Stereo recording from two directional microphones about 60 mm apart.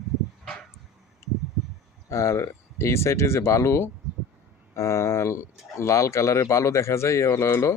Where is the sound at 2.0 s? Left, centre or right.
Left.